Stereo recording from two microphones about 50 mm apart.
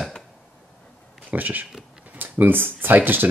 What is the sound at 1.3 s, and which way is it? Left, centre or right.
Speech, right.